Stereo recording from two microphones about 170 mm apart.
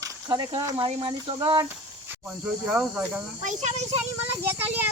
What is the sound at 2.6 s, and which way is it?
Speech, 5° right (ahead or behind).